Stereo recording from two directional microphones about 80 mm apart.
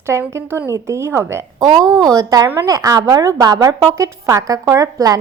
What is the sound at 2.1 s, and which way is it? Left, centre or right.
A woman's voice, right.